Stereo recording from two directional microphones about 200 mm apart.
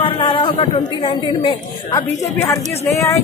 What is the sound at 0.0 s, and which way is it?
A woman's voice, 25° left (ahead or behind).